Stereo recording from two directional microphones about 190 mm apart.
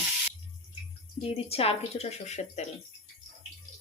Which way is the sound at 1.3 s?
30° left (ahead or behind).